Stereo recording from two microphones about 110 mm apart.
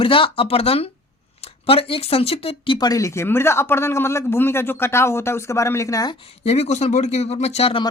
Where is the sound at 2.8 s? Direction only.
30° left (ahead or behind).